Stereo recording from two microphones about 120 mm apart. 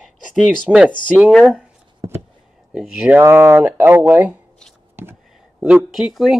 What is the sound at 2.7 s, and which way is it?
Speech, 5° right (ahead or behind).